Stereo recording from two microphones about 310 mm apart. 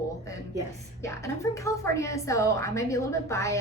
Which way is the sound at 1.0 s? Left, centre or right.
Centre.